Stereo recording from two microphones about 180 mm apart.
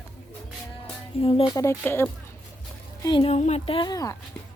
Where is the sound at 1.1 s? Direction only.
30° left (ahead or behind).